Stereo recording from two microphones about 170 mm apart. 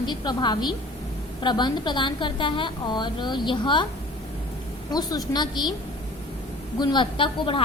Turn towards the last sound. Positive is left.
turn(degrees=30)  # may be behind; listen again after turning